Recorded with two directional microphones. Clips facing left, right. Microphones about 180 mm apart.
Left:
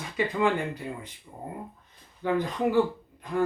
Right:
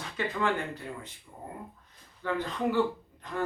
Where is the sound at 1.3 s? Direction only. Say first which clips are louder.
Left 4 dB; 35° left (ahead or behind).